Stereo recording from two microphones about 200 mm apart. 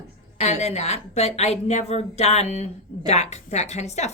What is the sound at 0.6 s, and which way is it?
Speech, 35° left (ahead or behind).